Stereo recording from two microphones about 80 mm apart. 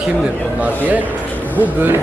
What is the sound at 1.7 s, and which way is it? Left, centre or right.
Speech, right.